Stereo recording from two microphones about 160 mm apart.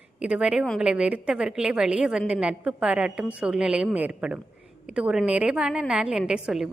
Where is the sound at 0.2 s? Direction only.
5° right (ahead or behind).